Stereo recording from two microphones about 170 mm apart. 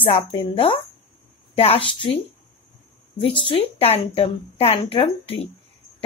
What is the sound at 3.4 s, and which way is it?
Speech, 35° left (ahead or behind).